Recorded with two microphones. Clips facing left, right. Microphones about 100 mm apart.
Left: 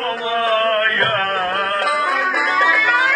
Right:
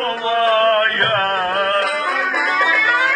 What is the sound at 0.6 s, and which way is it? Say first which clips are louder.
Music: right 2 dB; 40° right (ahead or behind).